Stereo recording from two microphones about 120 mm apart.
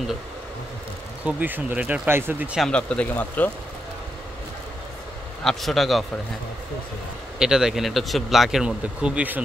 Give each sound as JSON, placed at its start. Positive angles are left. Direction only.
{"t": 1.2, "sound": "speech", "side_deg": -15}
{"t": 2.7, "sound": "speech", "side_deg": 10}
{"t": 5.4, "sound": "speech", "side_deg": 0}
{"t": 7.3, "sound": "speech", "side_deg": -5}